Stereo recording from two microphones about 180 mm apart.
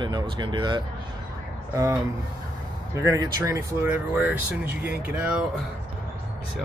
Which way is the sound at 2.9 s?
20° right (ahead or behind).